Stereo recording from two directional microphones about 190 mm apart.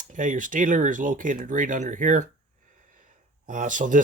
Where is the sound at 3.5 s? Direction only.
40° right (ahead or behind).